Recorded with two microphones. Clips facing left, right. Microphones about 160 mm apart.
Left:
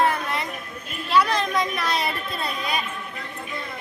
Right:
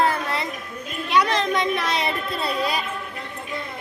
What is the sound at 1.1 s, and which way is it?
Children playing, 25° right (ahead or behind).